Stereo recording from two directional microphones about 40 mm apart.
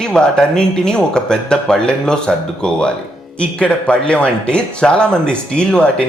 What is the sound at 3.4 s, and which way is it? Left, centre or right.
Speech, left.